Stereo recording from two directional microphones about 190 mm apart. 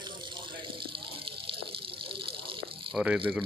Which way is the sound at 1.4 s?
25° right (ahead or behind).